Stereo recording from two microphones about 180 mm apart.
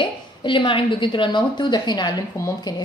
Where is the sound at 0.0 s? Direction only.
25° left (ahead or behind).